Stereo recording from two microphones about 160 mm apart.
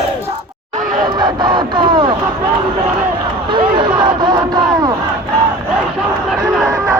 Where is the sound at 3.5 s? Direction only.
30° right (ahead or behind).